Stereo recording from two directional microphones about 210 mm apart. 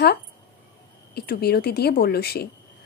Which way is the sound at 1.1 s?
50° left (ahead or behind).